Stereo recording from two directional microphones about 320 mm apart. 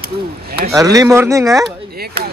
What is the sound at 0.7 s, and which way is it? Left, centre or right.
Speech, centre.